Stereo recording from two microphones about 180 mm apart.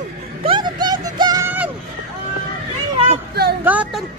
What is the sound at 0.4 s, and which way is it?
Music, 25° right (ahead or behind).